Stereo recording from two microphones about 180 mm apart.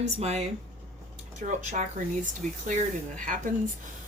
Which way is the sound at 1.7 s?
45° right (ahead or behind).